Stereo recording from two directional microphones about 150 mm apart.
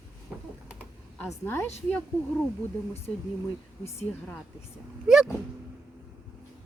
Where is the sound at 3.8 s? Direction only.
10° left (ahead or behind).